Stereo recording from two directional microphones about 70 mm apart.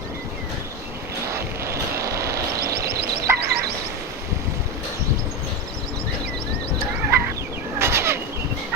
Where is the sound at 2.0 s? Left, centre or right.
Right.